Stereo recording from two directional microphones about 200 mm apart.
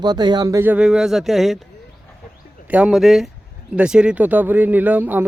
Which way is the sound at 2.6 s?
5° right (ahead or behind).